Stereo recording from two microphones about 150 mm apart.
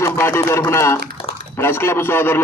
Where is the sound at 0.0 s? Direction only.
20° left (ahead or behind).